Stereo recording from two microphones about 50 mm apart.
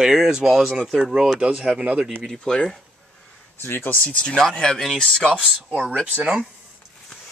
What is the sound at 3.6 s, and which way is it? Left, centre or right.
Speech, left.